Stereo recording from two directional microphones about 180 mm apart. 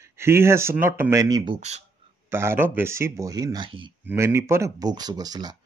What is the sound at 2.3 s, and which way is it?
Speech, 15° right (ahead or behind).